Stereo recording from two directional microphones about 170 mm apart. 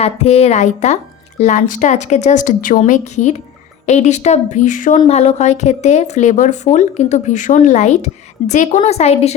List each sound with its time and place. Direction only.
0.0 s a woman's voice: 40° left (ahead or behind)